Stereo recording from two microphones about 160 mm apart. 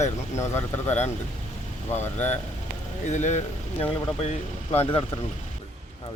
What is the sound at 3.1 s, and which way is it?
Speech, 50° left (ahead or behind).